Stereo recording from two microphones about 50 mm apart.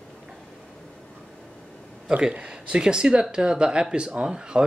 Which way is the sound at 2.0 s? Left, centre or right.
Centre.